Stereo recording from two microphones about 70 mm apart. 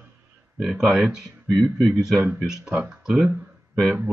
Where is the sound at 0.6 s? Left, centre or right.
Centre.